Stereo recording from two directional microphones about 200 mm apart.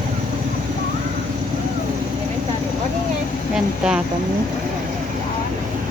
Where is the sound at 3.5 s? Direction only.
5° right (ahead or behind).